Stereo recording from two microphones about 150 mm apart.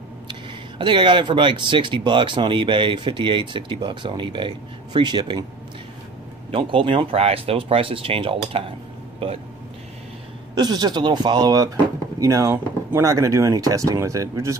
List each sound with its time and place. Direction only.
0.3 s speech: 30° right (ahead or behind)
6.5 s speech: 35° right (ahead or behind)
10.5 s speech: 30° right (ahead or behind)